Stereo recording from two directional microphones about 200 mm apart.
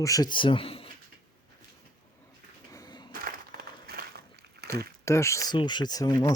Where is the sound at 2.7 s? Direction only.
20° left (ahead or behind).